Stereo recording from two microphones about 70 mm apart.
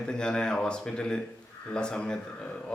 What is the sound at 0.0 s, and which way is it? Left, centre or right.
A man's voice, centre.